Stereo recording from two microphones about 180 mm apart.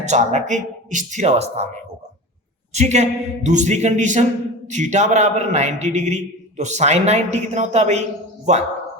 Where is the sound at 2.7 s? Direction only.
40° right (ahead or behind).